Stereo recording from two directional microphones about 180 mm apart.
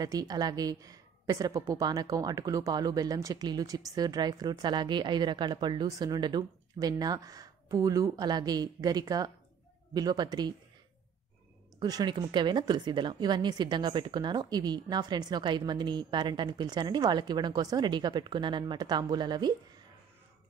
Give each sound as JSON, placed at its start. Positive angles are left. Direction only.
{"t": 0.0, "sound": "a woman's voice", "side_deg": -20}
{"t": 11.8, "sound": "a woman's voice", "side_deg": -25}